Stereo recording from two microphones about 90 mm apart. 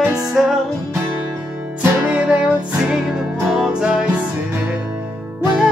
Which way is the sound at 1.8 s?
15° right (ahead or behind).